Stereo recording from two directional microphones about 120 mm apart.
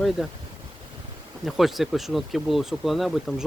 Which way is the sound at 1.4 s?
Centre (ahead or behind).